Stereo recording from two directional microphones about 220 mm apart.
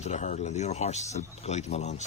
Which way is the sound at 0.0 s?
30° left (ahead or behind).